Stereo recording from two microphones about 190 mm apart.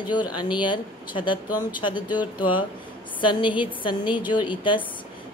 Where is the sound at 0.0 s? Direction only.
25° left (ahead or behind).